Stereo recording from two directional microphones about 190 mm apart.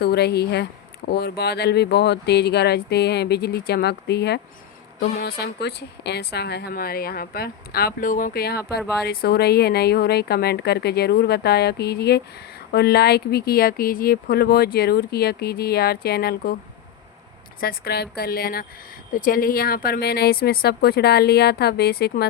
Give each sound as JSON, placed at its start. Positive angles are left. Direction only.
{"t": 0.0, "sound": "speech", "side_deg": 55}
{"t": 17.6, "sound": "a woman's voice", "side_deg": 55}